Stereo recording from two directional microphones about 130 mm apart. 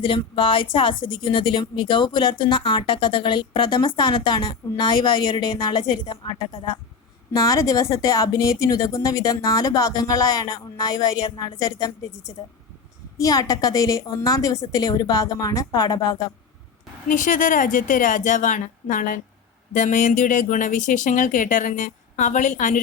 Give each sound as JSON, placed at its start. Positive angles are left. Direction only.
{"t": 0.0, "sound": "a woman's voice", "side_deg": 40}
{"t": 7.3, "sound": "speech", "side_deg": 25}
{"t": 13.1, "sound": "speech", "side_deg": 25}
{"t": 17.1, "sound": "a woman's voice", "side_deg": 90}
{"t": 19.7, "sound": "speech", "side_deg": 70}